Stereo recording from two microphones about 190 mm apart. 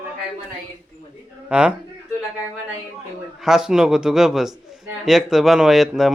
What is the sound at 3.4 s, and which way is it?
A man's voice, 5° right (ahead or behind).